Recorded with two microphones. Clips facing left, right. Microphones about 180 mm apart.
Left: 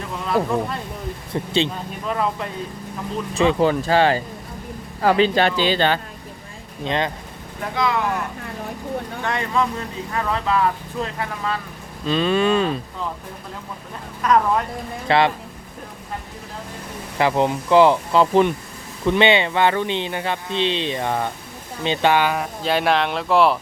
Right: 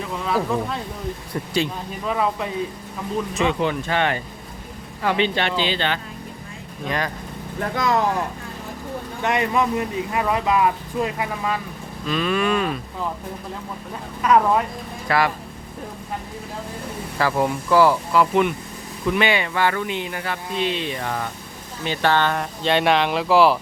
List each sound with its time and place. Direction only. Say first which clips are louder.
0.3 s speech: left 2 dB; centre (ahead or behind)
2.0 s speech: right 1 dB; 5° right (ahead or behind)
3.3 s speech: left 6 dB; 35° left (ahead or behind)
6.8 s speech: left 3 dB; 25° left (ahead or behind)
7.8 s speech: right 1 dB; 45° right (ahead or behind)
9.2 s speech: right 3 dB; 20° right (ahead or behind)
12.0 s speech: left 3 dB; 30° left (ahead or behind)
14.2 s speech: right 1 dB; 5° right (ahead or behind)
15.0 s speech: left 3 dB; 25° left (ahead or behind)
17.2 s speech: left 2 dB; 20° left (ahead or behind); by 23.6 s centre (ahead or behind)